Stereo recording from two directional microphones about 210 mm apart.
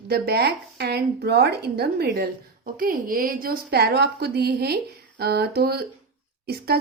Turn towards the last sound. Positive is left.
turn(degrees=-45)  # may be behind; listen again after turning